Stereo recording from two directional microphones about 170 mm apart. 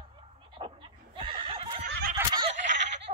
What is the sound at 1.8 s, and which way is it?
Snicker, 65° right (ahead or behind).